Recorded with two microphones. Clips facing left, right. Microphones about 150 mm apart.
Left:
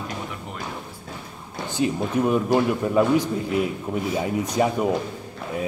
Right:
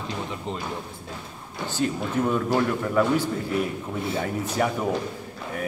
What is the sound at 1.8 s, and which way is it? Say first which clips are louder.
A man's voice: left 3 dB; 20° left (ahead or behind).